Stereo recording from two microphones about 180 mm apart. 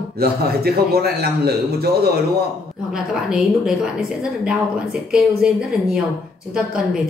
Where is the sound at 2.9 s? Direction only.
5° right (ahead or behind).